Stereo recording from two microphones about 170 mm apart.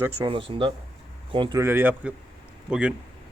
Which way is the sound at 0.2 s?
30° right (ahead or behind).